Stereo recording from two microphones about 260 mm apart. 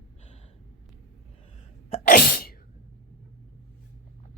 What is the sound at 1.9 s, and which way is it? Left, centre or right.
Sneeze, left.